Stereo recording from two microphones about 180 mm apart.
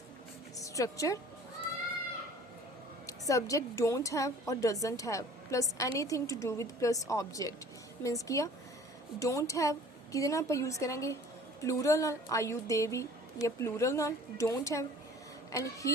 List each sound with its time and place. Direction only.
0.6 s a woman's voice: 20° left (ahead or behind)
3.1 s a woman's voice: 20° left (ahead or behind)